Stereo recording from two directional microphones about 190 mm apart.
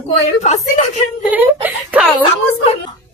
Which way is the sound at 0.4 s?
35° left (ahead or behind).